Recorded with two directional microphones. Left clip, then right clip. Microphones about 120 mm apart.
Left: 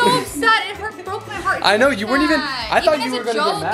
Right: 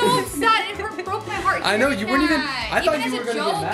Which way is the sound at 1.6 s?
15° left (ahead or behind).